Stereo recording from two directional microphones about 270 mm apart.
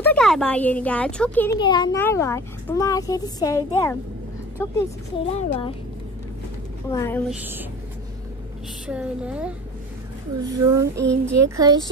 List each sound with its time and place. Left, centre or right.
0.0 s speech: centre
1.6 s a child's voice: centre
5.3 s speech: left
6.9 s a child's voice: centre
8.8 s speech: centre